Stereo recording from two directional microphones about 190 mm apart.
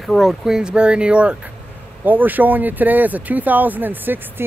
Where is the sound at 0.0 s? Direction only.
Centre (ahead or behind).